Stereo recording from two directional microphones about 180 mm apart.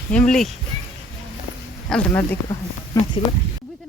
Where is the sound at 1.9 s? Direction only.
5° left (ahead or behind).